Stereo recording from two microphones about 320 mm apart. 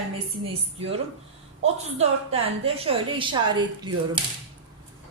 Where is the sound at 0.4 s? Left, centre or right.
Centre.